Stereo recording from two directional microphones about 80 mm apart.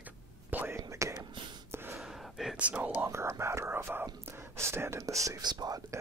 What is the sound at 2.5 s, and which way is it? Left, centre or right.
Speech, centre.